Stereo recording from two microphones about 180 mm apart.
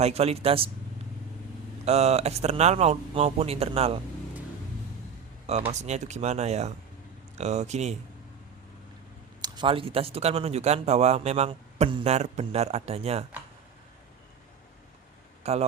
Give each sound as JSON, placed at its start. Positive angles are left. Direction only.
{"t": 0.0, "sound": "speech", "side_deg": -35}
{"t": 1.8, "sound": "speech", "side_deg": -35}
{"t": 5.5, "sound": "speech", "side_deg": -35}
{"t": 9.4, "sound": "speech", "side_deg": -25}
{"t": 15.4, "sound": "speech", "side_deg": -35}